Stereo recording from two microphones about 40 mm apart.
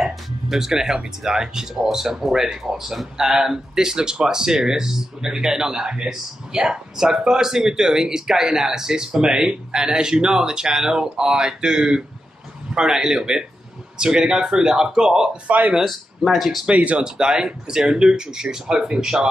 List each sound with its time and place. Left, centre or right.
0.0 s speech: centre
15.4 s speech: right
15.8 s speech: centre
16.7 s speech: right
17.0 s speech: centre